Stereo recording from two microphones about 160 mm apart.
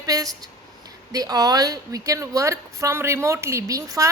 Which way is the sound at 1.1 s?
25° right (ahead or behind).